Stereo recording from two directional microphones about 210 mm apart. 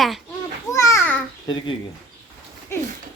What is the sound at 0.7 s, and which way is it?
Babbling, 15° left (ahead or behind).